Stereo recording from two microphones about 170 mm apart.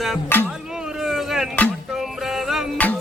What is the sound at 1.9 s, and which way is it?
Music, centre (ahead or behind).